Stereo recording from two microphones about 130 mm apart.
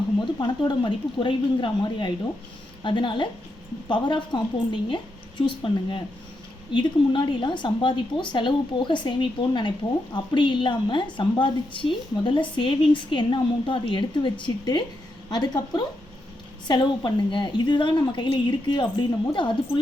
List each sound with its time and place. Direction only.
0.2 s a woman's voice: 35° left (ahead or behind)